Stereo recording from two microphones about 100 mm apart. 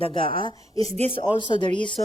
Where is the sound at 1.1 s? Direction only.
50° left (ahead or behind).